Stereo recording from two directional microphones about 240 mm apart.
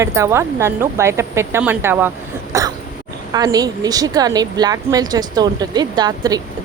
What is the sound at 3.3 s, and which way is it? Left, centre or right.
Speech, centre.